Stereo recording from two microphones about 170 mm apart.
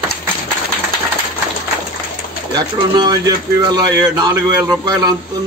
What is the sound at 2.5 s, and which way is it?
Speech, 25° right (ahead or behind).